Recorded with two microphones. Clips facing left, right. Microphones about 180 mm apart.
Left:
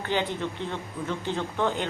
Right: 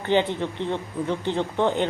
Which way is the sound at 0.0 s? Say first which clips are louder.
Right 6 dB; 20° right (ahead or behind).